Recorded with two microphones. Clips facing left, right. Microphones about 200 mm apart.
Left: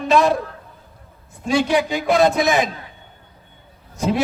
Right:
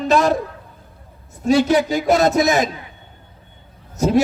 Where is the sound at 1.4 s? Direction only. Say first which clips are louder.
Right 3 dB; 45° right (ahead or behind).